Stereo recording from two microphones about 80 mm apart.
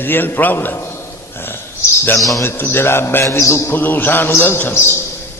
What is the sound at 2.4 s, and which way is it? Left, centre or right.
A man's voice, left.